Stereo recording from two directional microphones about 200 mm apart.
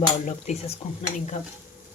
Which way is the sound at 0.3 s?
35° left (ahead or behind).